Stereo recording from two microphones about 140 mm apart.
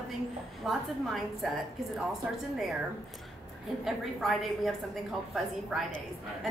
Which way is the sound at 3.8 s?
Centre (ahead or behind).